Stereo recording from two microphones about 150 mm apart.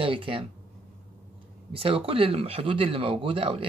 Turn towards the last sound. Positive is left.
turn(degrees=-35)  # may be behind; listen again after turning